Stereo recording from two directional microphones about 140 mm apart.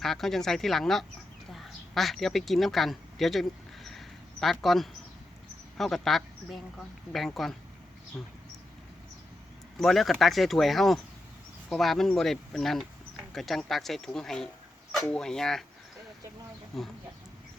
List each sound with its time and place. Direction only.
0.0 s speech: centre (ahead or behind)
3.8 s a sound: centre (ahead or behind)
5.7 s speech: centre (ahead or behind)
9.7 s speech: centre (ahead or behind)
16.7 s speech: centre (ahead or behind)